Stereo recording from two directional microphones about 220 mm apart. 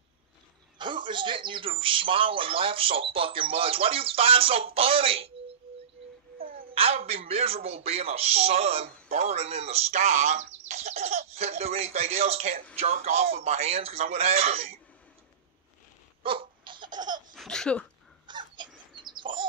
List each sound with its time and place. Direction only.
0.7 s speech: 20° right (ahead or behind)
6.3 s a sound: 40° right (ahead or behind)
6.7 s speech: 25° right (ahead or behind)
16.2 s laughter: 25° right (ahead or behind)
17.3 s laughter: centre (ahead or behind)
18.2 s a sound: 20° right (ahead or behind)
18.9 s bird: 20° right (ahead or behind)